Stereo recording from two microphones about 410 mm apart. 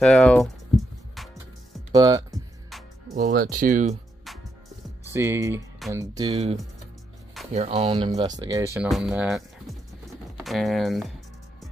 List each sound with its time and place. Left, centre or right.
0.0 s music: centre
1.9 s speech: centre
3.2 s speech: right
5.1 s speech: centre
7.5 s speech: centre